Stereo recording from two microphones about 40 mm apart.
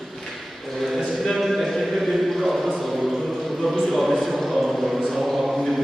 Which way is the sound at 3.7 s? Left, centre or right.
Centre.